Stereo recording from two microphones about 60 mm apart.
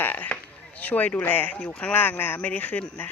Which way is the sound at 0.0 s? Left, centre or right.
Left.